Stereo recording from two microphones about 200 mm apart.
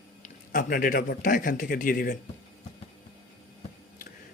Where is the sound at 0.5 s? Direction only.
45° left (ahead or behind).